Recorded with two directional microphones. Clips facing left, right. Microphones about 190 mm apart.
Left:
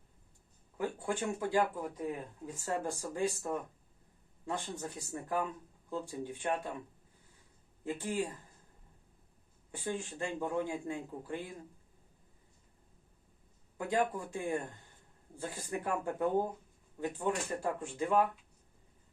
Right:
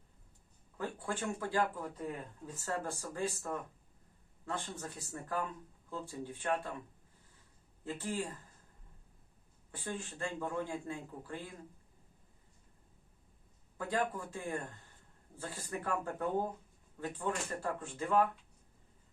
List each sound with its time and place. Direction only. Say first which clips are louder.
0.8 s speech: left 3 dB; 15° left (ahead or behind)
7.9 s speech: left 3 dB; 15° left (ahead or behind)
9.7 s speech: left 4 dB; 15° left (ahead or behind)
13.7 s speech: left 3 dB; 15° left (ahead or behind)